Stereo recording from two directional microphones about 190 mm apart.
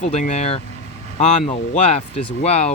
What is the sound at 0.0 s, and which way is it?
Speech, 40° left (ahead or behind).